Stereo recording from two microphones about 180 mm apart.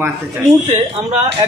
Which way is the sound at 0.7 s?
35° right (ahead or behind).